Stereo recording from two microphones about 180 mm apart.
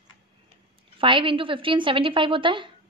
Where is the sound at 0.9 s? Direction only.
30° right (ahead or behind).